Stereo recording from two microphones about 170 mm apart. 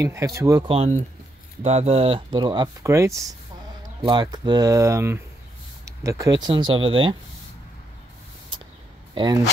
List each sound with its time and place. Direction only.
0.0 s speech: 15° right (ahead or behind)
0.7 s speech: 40° right (ahead or behind); by 6.3 s 20° right (ahead or behind)
6.4 s speech: 30° right (ahead or behind)
8.5 s a sound: 30° right (ahead or behind)
9.1 s speech: 25° right (ahead or behind)